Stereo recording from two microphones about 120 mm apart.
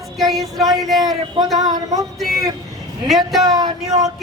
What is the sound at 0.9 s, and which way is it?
Child singing, centre (ahead or behind).